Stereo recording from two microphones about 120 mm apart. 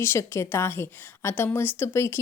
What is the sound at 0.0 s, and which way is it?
A woman's voice, 20° left (ahead or behind).